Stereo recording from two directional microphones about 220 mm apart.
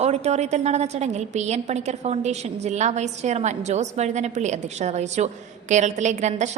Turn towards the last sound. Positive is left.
turn(degrees=-30)  # may be behind; listen again after turning